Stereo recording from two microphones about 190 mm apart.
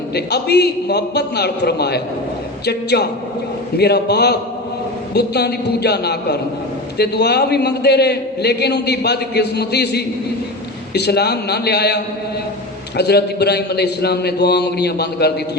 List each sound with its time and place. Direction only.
0.1 s a man's voice: 60° left (ahead or behind)
13.0 s a man's voice: 60° left (ahead or behind)